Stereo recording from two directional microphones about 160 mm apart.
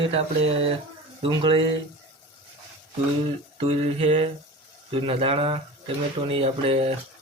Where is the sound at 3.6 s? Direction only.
40° right (ahead or behind).